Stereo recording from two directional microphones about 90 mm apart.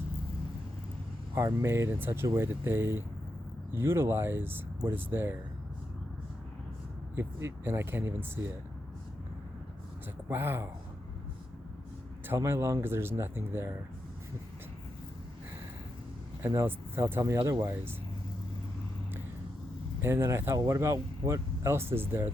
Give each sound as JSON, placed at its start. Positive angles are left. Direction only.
{"t": 1.4, "sound": "speech", "side_deg": -30}
{"t": 7.2, "sound": "speech", "side_deg": -30}
{"t": 10.2, "sound": "speech", "side_deg": -25}
{"t": 12.4, "sound": "speech", "side_deg": -35}
{"t": 16.6, "sound": "speech", "side_deg": -30}
{"t": 20.0, "sound": "speech", "side_deg": -30}